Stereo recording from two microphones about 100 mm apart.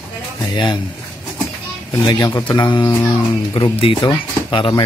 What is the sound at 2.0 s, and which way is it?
Speech, 45° left (ahead or behind).